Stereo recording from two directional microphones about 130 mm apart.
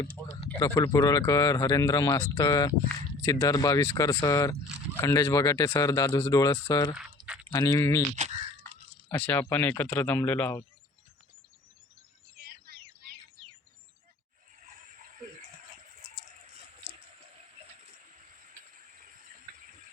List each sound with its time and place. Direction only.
0.2 s speech: 10° left (ahead or behind)
0.6 s speech: 25° left (ahead or behind)
6.9 s a sound: 5° right (ahead or behind)
7.5 s speech: 30° left (ahead or behind)
9.0 s speech: 15° left (ahead or behind)